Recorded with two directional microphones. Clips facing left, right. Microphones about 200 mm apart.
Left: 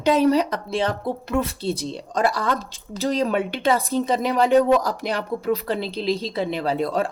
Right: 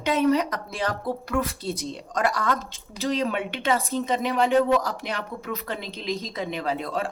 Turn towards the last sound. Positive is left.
turn(degrees=35)  # may be behind; listen again after turning